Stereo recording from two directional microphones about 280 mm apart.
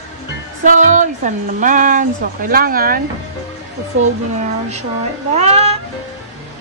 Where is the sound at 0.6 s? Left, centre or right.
Right.